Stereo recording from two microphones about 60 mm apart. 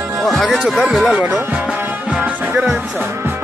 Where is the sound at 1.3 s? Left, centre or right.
Centre.